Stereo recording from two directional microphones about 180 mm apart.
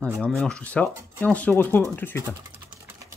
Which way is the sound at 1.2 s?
5° left (ahead or behind).